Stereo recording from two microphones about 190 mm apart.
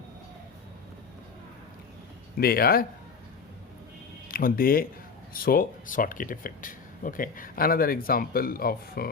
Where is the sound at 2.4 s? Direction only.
50° left (ahead or behind).